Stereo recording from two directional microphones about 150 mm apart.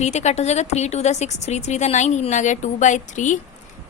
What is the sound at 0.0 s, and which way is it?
A woman's voice, 50° left (ahead or behind).